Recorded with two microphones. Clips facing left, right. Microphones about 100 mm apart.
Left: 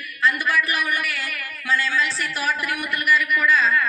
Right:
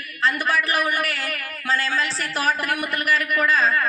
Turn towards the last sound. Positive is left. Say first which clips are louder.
# even
turn(degrees=-40)  # may be behind; listen again after turning